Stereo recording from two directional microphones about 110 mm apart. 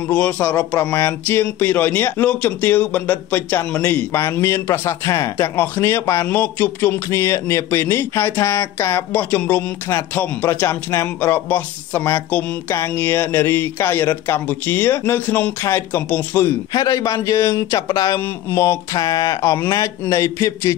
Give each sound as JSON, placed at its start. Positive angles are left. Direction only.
{"t": 0.1, "sound": "a man's voice", "side_deg": 15}
{"t": 0.7, "sound": "speech", "side_deg": 25}
{"t": 16.7, "sound": "speech", "side_deg": 30}
{"t": 18.9, "sound": "speech", "side_deg": 30}